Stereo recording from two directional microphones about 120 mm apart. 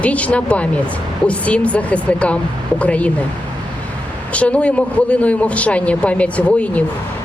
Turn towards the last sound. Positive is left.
turn(degrees=10)  # may be behind; listen again after turning